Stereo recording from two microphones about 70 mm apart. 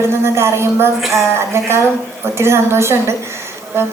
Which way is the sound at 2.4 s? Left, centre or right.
Right.